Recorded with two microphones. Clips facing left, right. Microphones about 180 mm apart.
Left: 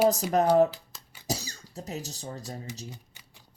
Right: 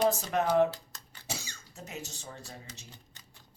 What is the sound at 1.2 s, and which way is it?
Speech, 40° left (ahead or behind).